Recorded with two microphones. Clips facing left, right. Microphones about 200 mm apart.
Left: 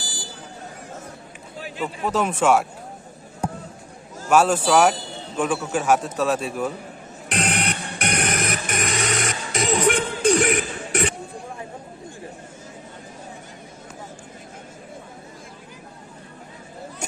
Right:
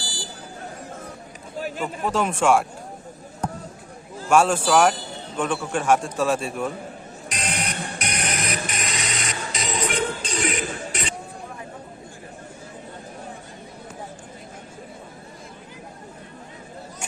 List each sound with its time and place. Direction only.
0.0 s buzzer: 20° left (ahead or behind)
1.5 s run: 45° right (ahead or behind)
2.0 s speech: centre (ahead or behind)
3.4 s basketball bounce: 10° left (ahead or behind)
4.3 s speech: 5° left (ahead or behind)
7.3 s music: 60° left (ahead or behind)